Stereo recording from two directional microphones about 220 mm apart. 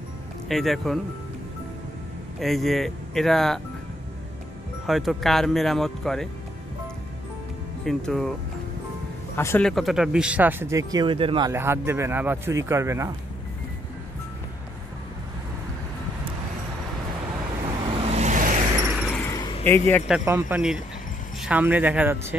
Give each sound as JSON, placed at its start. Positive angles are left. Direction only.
{"t": 0.5, "sound": "speech", "side_deg": 0}
{"t": 2.4, "sound": "speech", "side_deg": 0}
{"t": 4.8, "sound": "speech", "side_deg": 0}
{"t": 7.8, "sound": "speech", "side_deg": 0}
{"t": 9.3, "sound": "speech", "side_deg": 10}
{"t": 10.9, "sound": "speech", "side_deg": -20}
{"t": 18.0, "sound": "vehicle", "side_deg": -30}
{"t": 18.8, "sound": "a sound", "side_deg": -10}
{"t": 19.0, "sound": "a sound", "side_deg": 5}
{"t": 19.3, "sound": "a sound", "side_deg": 15}
{"t": 20.1, "sound": "speech", "side_deg": -10}